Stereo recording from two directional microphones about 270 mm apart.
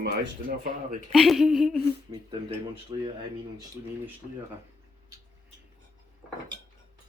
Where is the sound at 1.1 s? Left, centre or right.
Centre.